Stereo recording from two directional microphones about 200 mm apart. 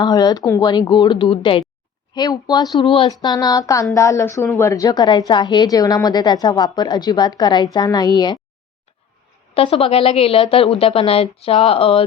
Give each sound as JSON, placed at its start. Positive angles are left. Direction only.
{"t": 0.0, "sound": "a woman's voice", "side_deg": 20}
{"t": 9.6, "sound": "a woman's voice", "side_deg": 30}